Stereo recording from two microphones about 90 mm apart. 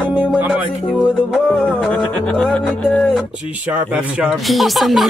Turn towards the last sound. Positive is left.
turn(degrees=0)  # may be behind; listen again after turning